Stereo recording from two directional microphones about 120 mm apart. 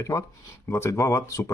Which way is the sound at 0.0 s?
25° left (ahead or behind).